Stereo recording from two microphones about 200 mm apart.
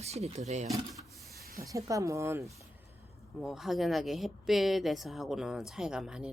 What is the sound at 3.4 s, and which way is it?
Speech, centre (ahead or behind).